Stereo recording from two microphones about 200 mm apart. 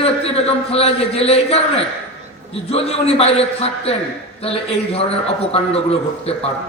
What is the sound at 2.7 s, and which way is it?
A man's voice, 30° left (ahead or behind).